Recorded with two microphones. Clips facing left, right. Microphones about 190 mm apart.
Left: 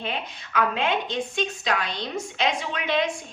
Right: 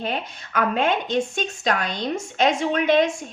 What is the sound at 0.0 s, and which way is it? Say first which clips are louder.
A woman's voice: right 4 dB; 45° right (ahead or behind).